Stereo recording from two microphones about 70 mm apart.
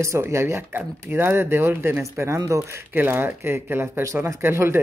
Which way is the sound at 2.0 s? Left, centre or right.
Right.